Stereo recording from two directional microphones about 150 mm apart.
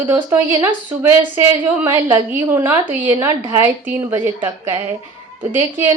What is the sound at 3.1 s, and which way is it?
Speech, 30° right (ahead or behind).